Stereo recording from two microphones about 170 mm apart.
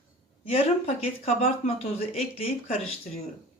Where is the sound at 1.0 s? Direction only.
35° left (ahead or behind).